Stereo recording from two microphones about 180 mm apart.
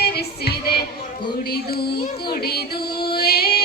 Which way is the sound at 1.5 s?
60° left (ahead or behind).